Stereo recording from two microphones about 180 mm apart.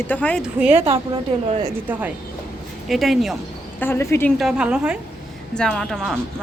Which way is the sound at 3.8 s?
15° left (ahead or behind).